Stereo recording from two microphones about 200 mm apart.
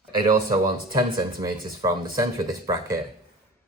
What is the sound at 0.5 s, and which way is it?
Speech, 20° right (ahead or behind).